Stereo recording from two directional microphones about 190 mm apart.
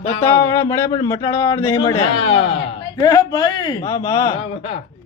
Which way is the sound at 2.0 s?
30° left (ahead or behind).